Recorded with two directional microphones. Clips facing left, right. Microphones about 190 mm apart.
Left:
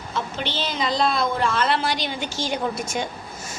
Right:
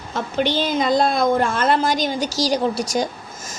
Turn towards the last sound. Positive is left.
turn(degrees=-35)  # may be behind; listen again after turning